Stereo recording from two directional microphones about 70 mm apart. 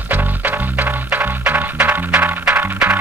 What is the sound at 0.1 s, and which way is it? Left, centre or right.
Music, right.